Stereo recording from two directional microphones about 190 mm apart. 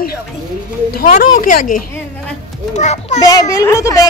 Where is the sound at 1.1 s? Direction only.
45° left (ahead or behind).